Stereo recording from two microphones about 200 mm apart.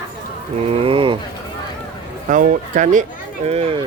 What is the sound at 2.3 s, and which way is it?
Speech, 40° right (ahead or behind).